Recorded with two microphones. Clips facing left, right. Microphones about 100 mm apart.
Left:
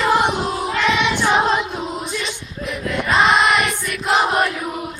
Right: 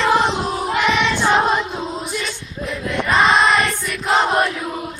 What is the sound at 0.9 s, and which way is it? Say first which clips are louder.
Singing: left 1 dB; 15° left (ahead or behind).